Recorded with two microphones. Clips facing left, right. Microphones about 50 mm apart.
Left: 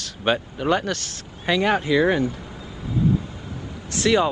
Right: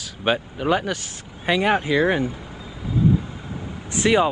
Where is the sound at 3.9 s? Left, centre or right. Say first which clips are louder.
Right 1 dB; centre.